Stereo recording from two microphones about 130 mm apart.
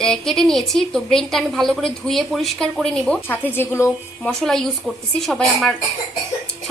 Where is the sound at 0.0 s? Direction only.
5° left (ahead or behind).